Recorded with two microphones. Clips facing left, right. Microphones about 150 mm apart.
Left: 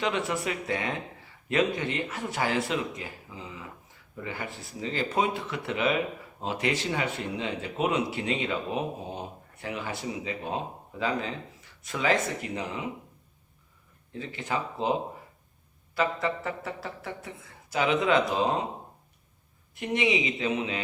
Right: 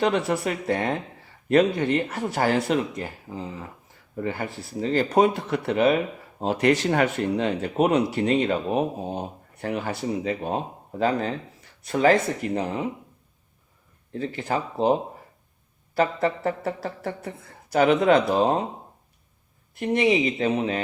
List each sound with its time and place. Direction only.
0.0 s speech: 40° right (ahead or behind)
14.1 s speech: 40° right (ahead or behind)
16.0 s speech: 40° right (ahead or behind)
19.8 s speech: 40° right (ahead or behind)